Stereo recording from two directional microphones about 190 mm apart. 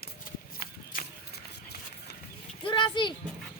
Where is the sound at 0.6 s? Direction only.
50° left (ahead or behind).